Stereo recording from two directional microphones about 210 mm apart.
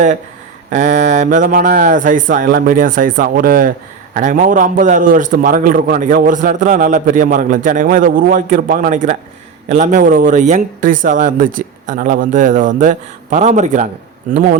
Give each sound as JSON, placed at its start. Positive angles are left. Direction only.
{"t": 0.7, "sound": "a man's voice", "side_deg": -35}